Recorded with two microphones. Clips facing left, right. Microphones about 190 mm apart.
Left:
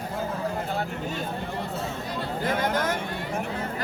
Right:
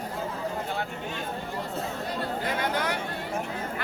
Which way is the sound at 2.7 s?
45° left (ahead or behind).